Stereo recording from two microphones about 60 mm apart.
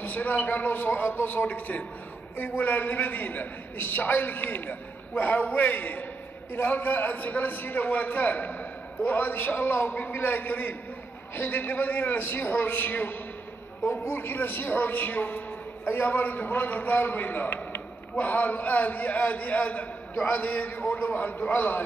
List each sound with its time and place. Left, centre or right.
0.0 s a man's voice: left